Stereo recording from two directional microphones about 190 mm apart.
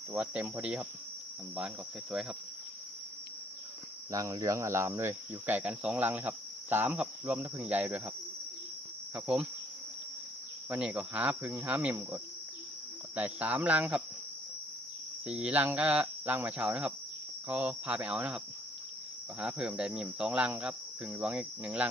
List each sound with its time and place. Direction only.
0.1 s cricket: 5° right (ahead or behind)
4.1 s cricket: 15° right (ahead or behind)
9.1 s cricket: 5° right (ahead or behind)
10.7 s cricket: 5° right (ahead or behind)
15.3 s cricket: 5° right (ahead or behind)